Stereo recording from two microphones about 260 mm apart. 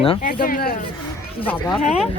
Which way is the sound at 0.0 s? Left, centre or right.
Left.